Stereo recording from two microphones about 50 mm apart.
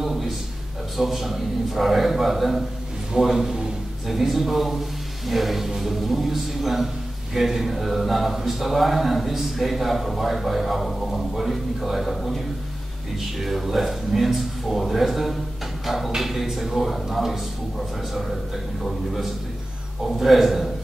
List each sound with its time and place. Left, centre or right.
0.0 s a sound: centre
0.9 s a man's voice: centre
13.4 s a man's voice: centre
18.8 s a man's voice: centre